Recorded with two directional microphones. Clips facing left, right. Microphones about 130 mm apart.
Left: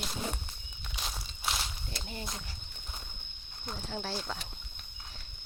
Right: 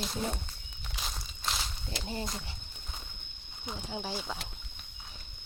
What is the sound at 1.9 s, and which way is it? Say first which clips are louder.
Speech: right 5 dB; 30° right (ahead or behind).